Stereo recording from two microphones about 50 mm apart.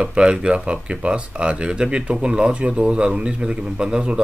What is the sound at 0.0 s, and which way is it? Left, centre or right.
A man's voice, right.